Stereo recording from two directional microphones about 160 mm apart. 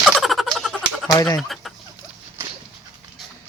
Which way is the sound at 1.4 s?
Centre (ahead or behind).